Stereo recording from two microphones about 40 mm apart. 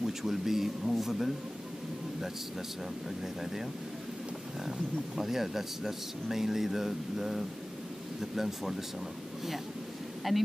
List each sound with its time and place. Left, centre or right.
0.0 s speech: centre
4.6 s speech: centre
10.3 s speech: centre